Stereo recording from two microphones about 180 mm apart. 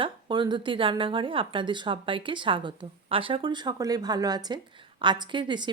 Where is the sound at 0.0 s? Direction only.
25° right (ahead or behind).